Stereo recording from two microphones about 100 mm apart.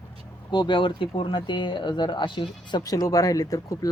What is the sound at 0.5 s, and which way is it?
Speech, 50° left (ahead or behind).